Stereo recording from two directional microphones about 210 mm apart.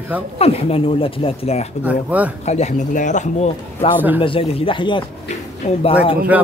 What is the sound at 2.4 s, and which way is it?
Speech, 35° left (ahead or behind).